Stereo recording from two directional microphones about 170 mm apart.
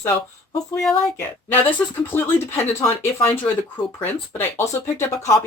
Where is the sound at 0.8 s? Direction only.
Centre (ahead or behind).